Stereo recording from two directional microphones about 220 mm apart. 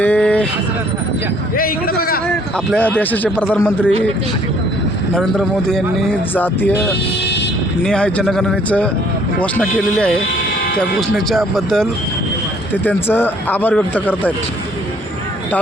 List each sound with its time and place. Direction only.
0.0 s vehicle: 5° left (ahead or behind)
1.5 s a man's voice: 40° left (ahead or behind)
2.6 s speech: 5° left (ahead or behind)
5.1 s a man's voice: centre (ahead or behind)
7.9 s a man's voice: 5° left (ahead or behind)